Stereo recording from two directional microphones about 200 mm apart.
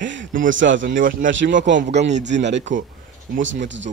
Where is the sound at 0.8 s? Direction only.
45° right (ahead or behind).